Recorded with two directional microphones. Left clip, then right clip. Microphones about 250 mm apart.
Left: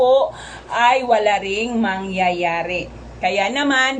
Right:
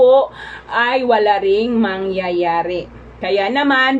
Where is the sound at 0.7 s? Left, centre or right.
Centre.